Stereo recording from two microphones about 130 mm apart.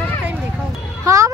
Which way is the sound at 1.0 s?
25° right (ahead or behind).